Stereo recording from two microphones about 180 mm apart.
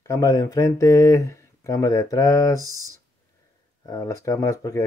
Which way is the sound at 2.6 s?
20° right (ahead or behind).